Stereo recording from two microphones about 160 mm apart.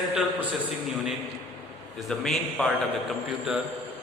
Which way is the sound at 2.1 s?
Centre (ahead or behind).